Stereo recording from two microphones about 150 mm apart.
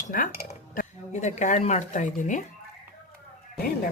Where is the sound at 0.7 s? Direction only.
50° left (ahead or behind).